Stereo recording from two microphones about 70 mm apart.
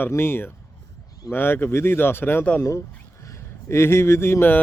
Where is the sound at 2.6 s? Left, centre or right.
Left.